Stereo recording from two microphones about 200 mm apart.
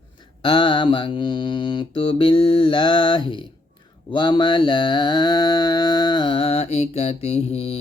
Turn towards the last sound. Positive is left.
turn(degrees=30)  # may be behind; listen again after turning